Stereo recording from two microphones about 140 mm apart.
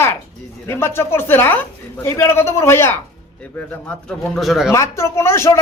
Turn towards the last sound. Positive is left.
turn(degrees=20)  # may be behind; listen again after turning